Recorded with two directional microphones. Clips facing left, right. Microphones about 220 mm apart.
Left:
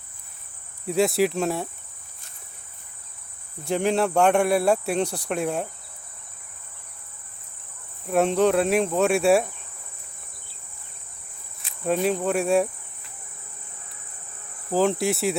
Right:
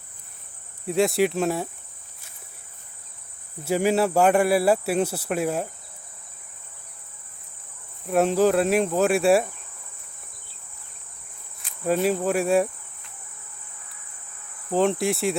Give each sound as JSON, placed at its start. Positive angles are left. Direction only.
{"t": 0.9, "sound": "speech", "side_deg": 0}
{"t": 3.6, "sound": "speech", "side_deg": -5}
{"t": 8.0, "sound": "speech", "side_deg": 0}
{"t": 11.6, "sound": "cricket", "side_deg": 0}
{"t": 12.0, "sound": "speech", "side_deg": -5}
{"t": 14.7, "sound": "speech", "side_deg": 0}